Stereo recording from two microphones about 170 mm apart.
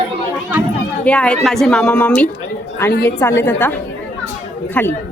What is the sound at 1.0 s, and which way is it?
Speech, 5° left (ahead or behind).